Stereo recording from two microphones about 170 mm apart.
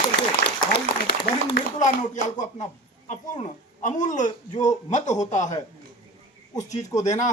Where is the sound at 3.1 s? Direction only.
35° left (ahead or behind).